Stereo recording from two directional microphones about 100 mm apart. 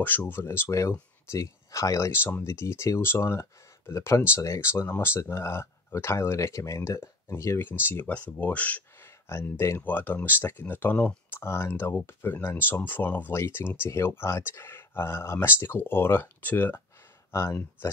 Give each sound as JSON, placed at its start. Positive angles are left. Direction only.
{"t": 0.0, "sound": "speech", "side_deg": 20}
{"t": 9.3, "sound": "speech", "side_deg": 25}